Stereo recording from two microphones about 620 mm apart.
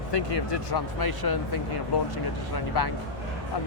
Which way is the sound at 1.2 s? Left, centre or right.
Left.